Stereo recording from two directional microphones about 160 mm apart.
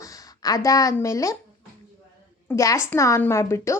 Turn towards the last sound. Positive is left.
turn(degrees=15)  # may be behind; listen again after turning